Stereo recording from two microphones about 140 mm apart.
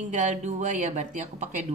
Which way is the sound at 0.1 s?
60° right (ahead or behind).